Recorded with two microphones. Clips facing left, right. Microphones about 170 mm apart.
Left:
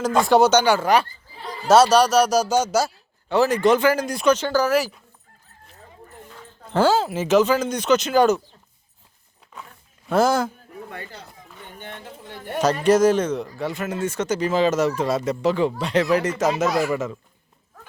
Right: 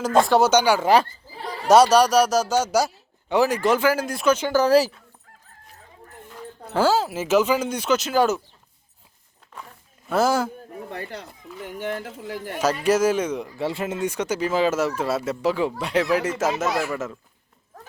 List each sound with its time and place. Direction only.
0.3 s speech: 5° right (ahead or behind)
2.7 s speech: 15° right (ahead or behind)
4.6 s speech: 30° right (ahead or behind)
6.7 s speech: 5° right (ahead or behind)
10.1 s speech: 5° right (ahead or behind)
11.1 s speech: 90° right
12.8 s speech: 10° right (ahead or behind)
13.6 s speech: 25° right (ahead or behind)
14.0 s speech: 10° right (ahead or behind)